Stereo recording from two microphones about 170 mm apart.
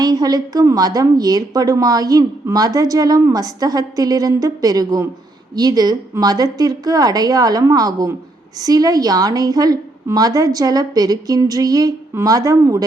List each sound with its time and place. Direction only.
0.0 s a woman's voice: 25° right (ahead or behind)